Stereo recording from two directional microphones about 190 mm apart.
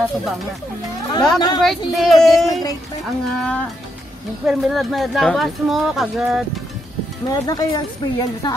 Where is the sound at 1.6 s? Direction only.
Centre (ahead or behind).